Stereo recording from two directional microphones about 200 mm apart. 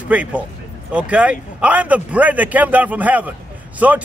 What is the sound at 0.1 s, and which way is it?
Speech, 5° right (ahead or behind).